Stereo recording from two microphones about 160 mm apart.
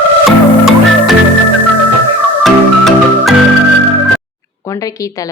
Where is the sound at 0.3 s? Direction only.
Centre (ahead or behind).